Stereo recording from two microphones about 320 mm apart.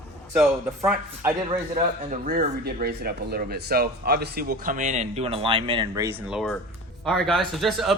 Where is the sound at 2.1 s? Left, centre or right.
Right.